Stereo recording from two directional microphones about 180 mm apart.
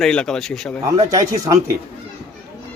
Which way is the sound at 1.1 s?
20° right (ahead or behind).